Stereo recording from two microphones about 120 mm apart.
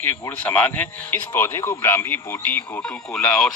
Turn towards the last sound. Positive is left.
turn(degrees=5)  # may be behind; listen again after turning